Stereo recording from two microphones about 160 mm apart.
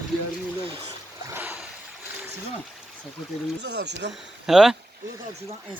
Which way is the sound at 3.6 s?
90° right.